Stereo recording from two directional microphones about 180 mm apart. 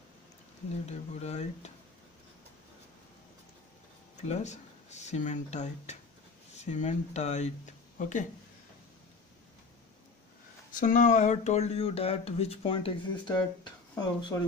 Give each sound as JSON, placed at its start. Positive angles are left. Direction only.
{"t": 0.8, "sound": "speech", "side_deg": 35}
{"t": 4.2, "sound": "speech", "side_deg": 40}
{"t": 10.7, "sound": "speech", "side_deg": 45}